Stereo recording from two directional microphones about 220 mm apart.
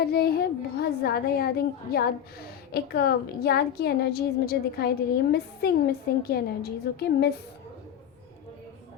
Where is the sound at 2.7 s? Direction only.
45° left (ahead or behind).